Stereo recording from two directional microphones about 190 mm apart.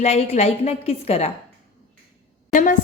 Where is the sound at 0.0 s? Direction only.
35° left (ahead or behind).